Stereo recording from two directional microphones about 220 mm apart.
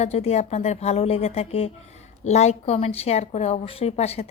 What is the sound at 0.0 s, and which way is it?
A woman's voice, 30° left (ahead or behind).